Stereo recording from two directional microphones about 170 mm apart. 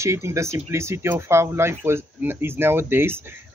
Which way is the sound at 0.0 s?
15° right (ahead or behind).